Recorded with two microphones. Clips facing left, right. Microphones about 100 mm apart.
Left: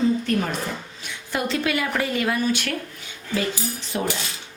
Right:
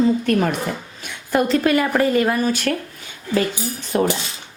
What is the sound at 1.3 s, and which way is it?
Speech, 45° right (ahead or behind).